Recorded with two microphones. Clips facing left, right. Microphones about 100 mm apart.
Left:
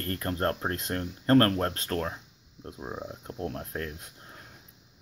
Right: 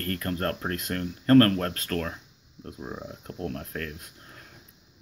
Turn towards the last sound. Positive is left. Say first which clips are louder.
# even
turn(degrees=25)  # may be behind; listen again after turning